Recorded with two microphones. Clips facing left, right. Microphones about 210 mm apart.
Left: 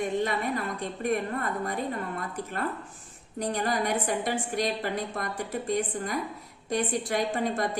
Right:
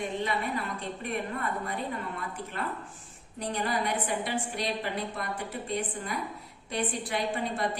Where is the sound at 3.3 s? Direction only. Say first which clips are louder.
Left 3 dB; 45° left (ahead or behind).